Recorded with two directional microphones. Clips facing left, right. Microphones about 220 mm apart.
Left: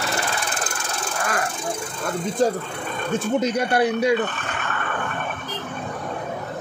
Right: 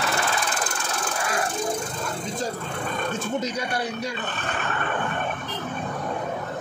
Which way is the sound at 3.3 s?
60° left (ahead or behind).